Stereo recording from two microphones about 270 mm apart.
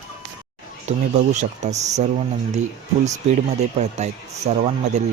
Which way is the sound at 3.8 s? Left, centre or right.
Right.